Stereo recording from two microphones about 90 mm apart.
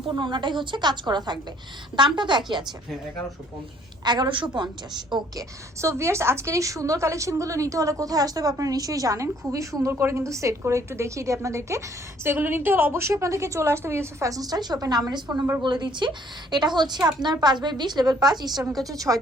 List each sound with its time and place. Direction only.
0.1 s a woman's voice: 60° right (ahead or behind)
4.0 s a woman's voice: 55° right (ahead or behind)
5.4 s a woman's voice: 35° right (ahead or behind)
12.2 s a woman's voice: 25° right (ahead or behind); by 19.2 s 40° right (ahead or behind)